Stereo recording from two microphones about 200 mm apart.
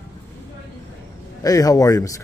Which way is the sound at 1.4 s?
20° left (ahead or behind).